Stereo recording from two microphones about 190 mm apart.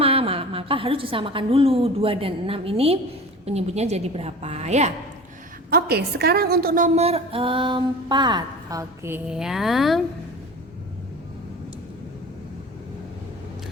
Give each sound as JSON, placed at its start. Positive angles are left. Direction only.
{"t": 0.0, "sound": "a woman's voice", "side_deg": -30}
{"t": 5.7, "sound": "a woman's voice", "side_deg": -55}